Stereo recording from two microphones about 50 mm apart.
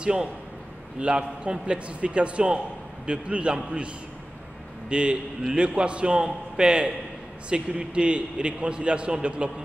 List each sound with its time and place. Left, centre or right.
0.0 s a man's voice: centre